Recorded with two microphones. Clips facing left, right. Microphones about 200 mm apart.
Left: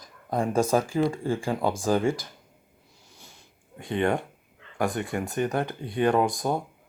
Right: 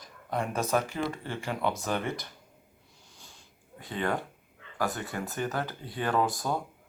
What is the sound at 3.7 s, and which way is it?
Speech, 25° left (ahead or behind).